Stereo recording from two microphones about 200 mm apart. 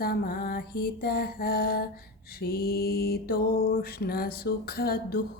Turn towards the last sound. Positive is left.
turn(degrees=50)  # may be behind; listen again after turning